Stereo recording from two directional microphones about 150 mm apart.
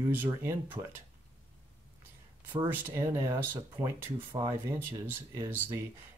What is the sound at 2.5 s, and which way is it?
Speech, 15° right (ahead or behind).